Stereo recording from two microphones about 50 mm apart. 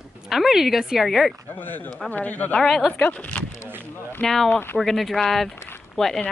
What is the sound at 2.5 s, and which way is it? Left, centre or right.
Speech, centre.